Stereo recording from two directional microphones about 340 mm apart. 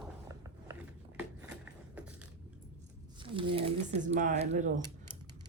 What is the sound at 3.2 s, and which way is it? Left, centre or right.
Speech, centre.